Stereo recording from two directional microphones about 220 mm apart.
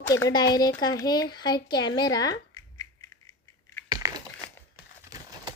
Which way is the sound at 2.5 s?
15° left (ahead or behind).